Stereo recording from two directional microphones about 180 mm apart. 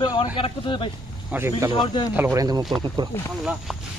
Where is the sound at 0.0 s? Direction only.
25° left (ahead or behind).